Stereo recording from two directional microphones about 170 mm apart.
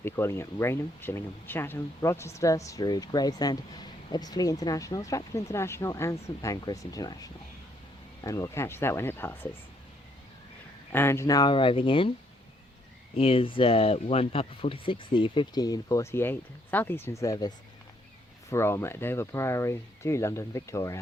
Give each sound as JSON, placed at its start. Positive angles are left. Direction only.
{"t": 0.0, "sound": "speech", "side_deg": 15}
{"t": 10.9, "sound": "speech", "side_deg": 15}
{"t": 13.1, "sound": "speech", "side_deg": 35}
{"t": 18.5, "sound": "speech", "side_deg": 15}